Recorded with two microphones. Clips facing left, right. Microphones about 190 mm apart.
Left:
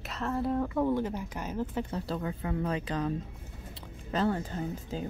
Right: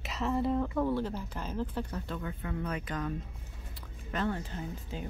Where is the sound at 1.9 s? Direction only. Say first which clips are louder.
Left 4 dB; 35° left (ahead or behind).